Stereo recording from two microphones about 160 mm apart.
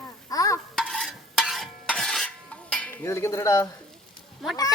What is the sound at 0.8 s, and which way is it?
Stir, centre (ahead or behind).